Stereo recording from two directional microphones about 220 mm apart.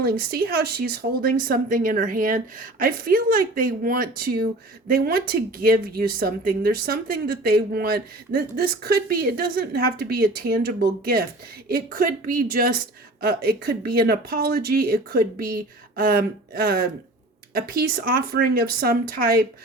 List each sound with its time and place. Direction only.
0.0 s speech: 45° right (ahead or behind)